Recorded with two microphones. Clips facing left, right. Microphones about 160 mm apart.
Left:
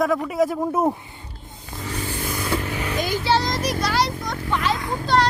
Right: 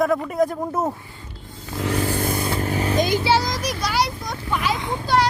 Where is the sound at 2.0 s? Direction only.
45° right (ahead or behind).